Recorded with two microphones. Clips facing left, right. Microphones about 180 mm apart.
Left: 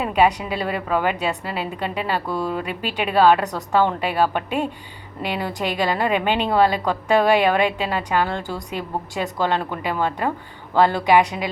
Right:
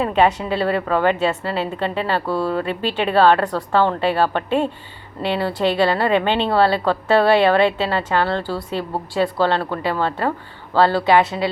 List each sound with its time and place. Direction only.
0.0 s a woman's voice: 15° left (ahead or behind)